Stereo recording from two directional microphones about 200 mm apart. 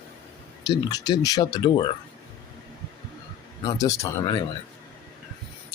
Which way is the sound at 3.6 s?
15° left (ahead or behind).